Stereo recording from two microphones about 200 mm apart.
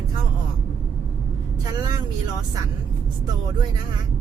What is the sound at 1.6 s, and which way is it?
Speech, 20° right (ahead or behind).